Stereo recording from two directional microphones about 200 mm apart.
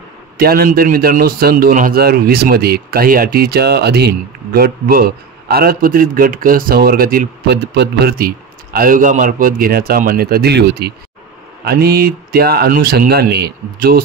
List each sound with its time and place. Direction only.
0.4 s a man's voice: 50° right (ahead or behind)